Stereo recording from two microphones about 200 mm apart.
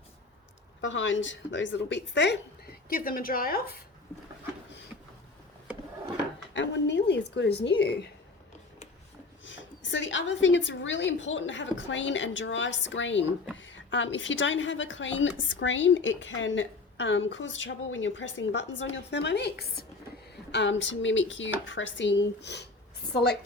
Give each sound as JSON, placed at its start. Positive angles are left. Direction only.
{"t": 0.8, "sound": "a woman's voice", "side_deg": 65}
{"t": 6.5, "sound": "a woman's voice", "side_deg": 65}
{"t": 9.4, "sound": "a woman's voice", "side_deg": 70}